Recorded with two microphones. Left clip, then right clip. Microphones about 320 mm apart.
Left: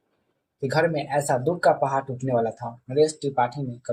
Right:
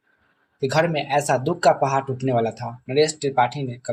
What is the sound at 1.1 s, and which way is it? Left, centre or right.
Speech, right.